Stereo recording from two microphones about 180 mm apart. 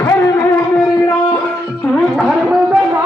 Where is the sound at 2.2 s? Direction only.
Centre (ahead or behind).